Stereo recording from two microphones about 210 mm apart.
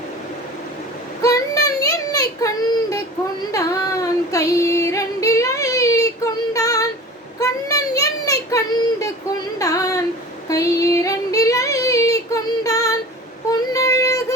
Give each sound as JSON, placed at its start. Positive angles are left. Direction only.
{"t": 1.2, "sound": "child singing", "side_deg": 15}
{"t": 3.5, "sound": "yodeling", "side_deg": 15}
{"t": 6.5, "sound": "child singing", "side_deg": 15}
{"t": 7.3, "sound": "a sound", "side_deg": 15}
{"t": 9.6, "sound": "female singing", "side_deg": 15}
{"t": 10.5, "sound": "child singing", "side_deg": 15}